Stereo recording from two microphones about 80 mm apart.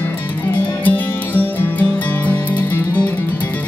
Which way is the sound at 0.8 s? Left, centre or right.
Left.